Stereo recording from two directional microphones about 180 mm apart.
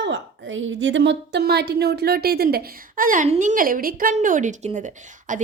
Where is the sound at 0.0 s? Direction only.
90° right.